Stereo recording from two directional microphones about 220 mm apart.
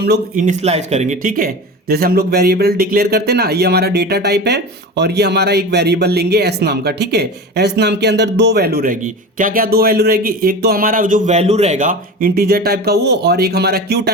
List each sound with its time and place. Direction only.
0.0 s a man's voice: 40° right (ahead or behind)